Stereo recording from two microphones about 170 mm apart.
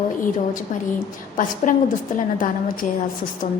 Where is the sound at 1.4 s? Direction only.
50° left (ahead or behind).